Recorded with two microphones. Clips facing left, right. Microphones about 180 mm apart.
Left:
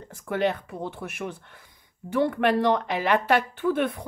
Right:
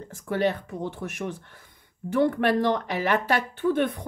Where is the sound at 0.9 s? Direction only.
40° right (ahead or behind).